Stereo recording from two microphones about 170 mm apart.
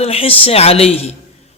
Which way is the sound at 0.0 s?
35° left (ahead or behind).